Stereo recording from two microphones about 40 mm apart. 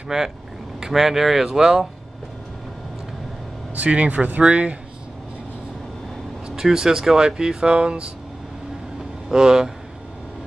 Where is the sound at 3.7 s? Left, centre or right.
Right.